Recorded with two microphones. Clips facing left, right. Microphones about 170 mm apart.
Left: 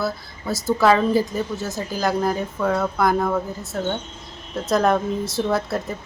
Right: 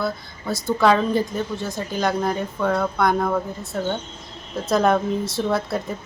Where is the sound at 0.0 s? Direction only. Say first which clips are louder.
Even; centre (ahead or behind).